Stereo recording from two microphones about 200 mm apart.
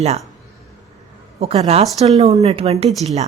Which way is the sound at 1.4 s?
30° right (ahead or behind).